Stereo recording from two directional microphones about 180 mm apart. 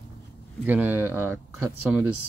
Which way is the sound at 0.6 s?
10° right (ahead or behind).